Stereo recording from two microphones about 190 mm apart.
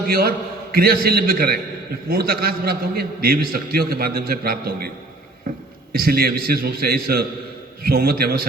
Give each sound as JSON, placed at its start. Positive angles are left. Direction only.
{"t": 0.1, "sound": "a man's voice", "side_deg": -50}
{"t": 5.9, "sound": "a man's voice", "side_deg": -50}